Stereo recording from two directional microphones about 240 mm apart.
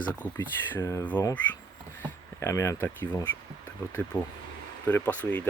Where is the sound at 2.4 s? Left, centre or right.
Centre.